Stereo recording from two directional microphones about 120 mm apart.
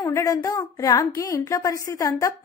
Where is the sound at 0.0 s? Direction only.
30° left (ahead or behind).